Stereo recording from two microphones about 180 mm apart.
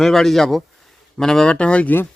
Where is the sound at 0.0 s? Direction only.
Centre (ahead or behind).